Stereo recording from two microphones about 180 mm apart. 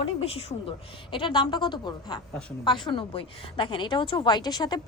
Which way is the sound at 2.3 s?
5° left (ahead or behind).